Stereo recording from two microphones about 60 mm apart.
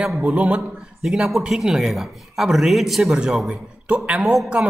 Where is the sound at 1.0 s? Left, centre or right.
Centre.